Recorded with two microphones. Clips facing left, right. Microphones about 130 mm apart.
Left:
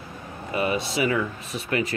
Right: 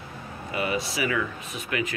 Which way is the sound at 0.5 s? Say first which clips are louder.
Left 3 dB; 25° left (ahead or behind).